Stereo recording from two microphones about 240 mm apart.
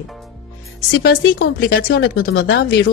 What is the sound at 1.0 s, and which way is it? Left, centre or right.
Speech, left.